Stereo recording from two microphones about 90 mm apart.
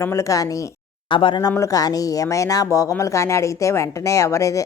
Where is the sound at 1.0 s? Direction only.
65° left (ahead or behind).